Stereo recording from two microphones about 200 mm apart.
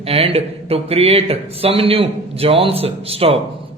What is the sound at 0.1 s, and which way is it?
A man's voice, 30° right (ahead or behind).